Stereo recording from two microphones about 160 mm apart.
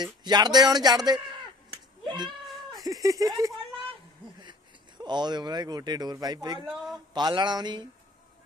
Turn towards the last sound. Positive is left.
turn(degrees=-25)  # may be behind; listen again after turning